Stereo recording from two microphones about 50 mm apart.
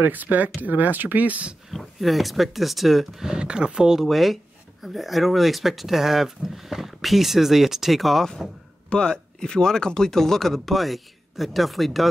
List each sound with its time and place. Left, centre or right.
0.0 s speech: right
1.7 s speech: centre
3.3 s speech: centre
8.9 s a man's voice: centre